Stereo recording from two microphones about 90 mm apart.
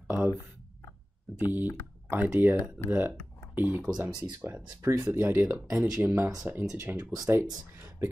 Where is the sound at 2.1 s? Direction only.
20° right (ahead or behind).